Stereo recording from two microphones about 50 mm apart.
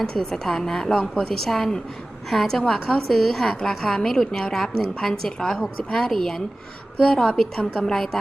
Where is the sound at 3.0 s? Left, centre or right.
Centre.